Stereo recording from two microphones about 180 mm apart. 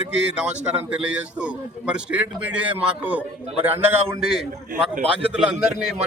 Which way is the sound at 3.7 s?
10° right (ahead or behind).